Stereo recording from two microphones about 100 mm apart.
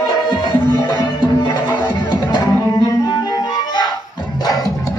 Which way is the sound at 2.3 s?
40° left (ahead or behind).